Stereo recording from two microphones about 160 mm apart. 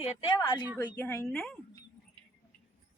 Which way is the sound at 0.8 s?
15° left (ahead or behind).